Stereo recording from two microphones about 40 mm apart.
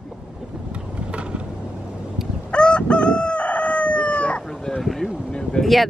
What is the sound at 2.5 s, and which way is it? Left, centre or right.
Chicken, left.